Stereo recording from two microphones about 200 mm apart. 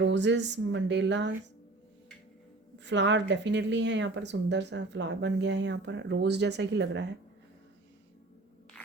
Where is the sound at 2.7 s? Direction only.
60° right (ahead or behind).